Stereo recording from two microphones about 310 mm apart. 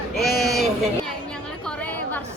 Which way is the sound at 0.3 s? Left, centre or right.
Centre.